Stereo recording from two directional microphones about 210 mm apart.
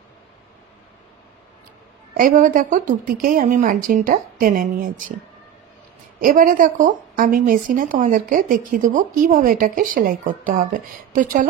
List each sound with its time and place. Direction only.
2.1 s a woman's voice: 40° right (ahead or behind)
6.2 s a woman's voice: 40° right (ahead or behind)